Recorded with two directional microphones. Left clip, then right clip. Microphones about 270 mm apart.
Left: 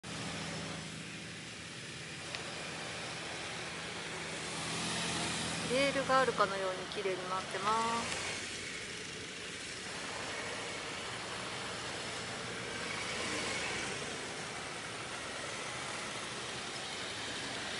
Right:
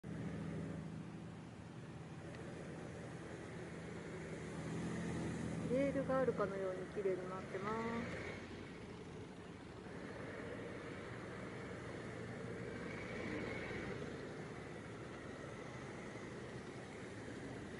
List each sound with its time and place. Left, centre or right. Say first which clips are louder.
4.7 s vehicle: left 10 dB; centre
6.0 s speech: left 8 dB; centre
12.8 s vehicle: left 11 dB; centre